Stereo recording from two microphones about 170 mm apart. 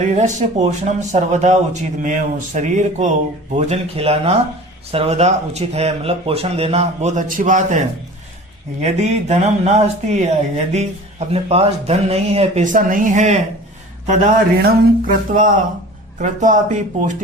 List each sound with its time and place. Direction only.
0.0 s speech: 45° right (ahead or behind)
8.8 s speech: 40° right (ahead or behind)
14.6 s speech: 55° right (ahead or behind)